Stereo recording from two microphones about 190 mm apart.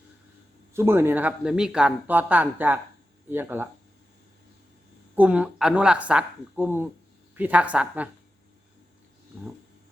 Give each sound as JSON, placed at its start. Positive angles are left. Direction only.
{"t": 0.7, "sound": "speech", "side_deg": -10}
{"t": 5.1, "sound": "speech", "side_deg": -5}